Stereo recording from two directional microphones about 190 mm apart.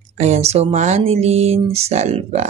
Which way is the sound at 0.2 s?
35° right (ahead or behind).